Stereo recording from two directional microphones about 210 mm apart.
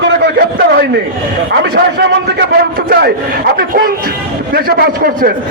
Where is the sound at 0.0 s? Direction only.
50° right (ahead or behind).